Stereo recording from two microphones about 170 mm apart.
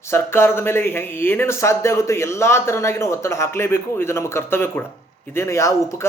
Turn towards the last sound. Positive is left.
turn(degrees=20)  # may be behind; listen again after turning